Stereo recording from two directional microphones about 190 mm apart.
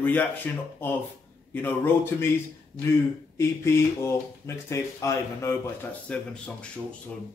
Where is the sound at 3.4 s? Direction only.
15° left (ahead or behind).